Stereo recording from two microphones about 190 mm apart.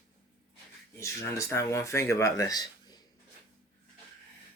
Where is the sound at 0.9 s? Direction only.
15° left (ahead or behind).